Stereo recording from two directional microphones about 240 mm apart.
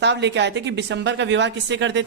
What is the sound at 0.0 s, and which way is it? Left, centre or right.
A man's voice, right.